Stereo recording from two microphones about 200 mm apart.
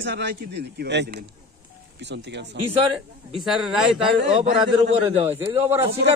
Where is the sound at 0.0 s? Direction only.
60° right (ahead or behind).